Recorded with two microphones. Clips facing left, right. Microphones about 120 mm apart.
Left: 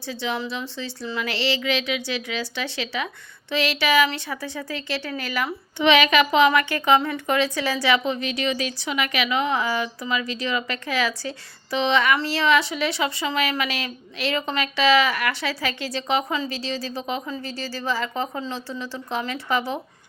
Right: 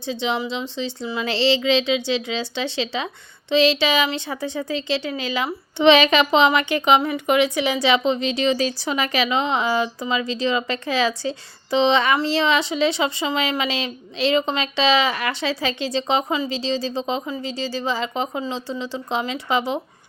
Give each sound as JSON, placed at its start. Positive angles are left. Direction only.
{"t": 0.0, "sound": "a woman's voice", "side_deg": -20}
{"t": 17.2, "sound": "a woman's voice", "side_deg": -15}